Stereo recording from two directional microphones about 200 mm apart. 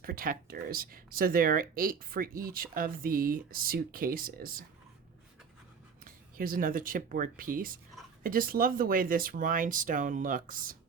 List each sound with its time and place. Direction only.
0.0 s speech: 45° right (ahead or behind)
6.1 s speech: 45° right (ahead or behind)